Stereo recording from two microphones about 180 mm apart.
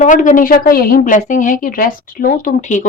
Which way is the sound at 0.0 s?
45° left (ahead or behind).